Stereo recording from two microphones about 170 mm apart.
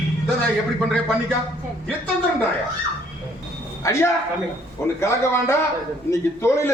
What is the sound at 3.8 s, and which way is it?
A man's voice, 15° left (ahead or behind).